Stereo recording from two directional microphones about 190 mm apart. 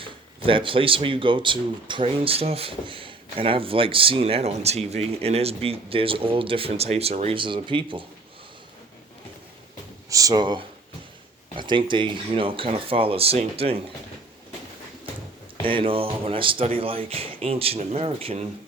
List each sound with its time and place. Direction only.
0.0 s speech: 25° right (ahead or behind)
10.1 s speech: 20° right (ahead or behind)
15.6 s speech: 30° right (ahead or behind)